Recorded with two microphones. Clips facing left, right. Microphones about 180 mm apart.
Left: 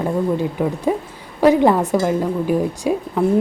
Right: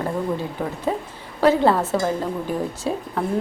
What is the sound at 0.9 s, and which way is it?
Speech, 10° left (ahead or behind).